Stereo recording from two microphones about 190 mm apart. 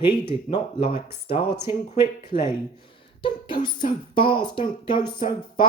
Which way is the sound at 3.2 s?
25° left (ahead or behind).